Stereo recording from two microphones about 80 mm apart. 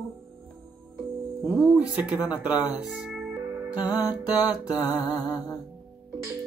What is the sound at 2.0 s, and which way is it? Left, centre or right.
Speech, centre.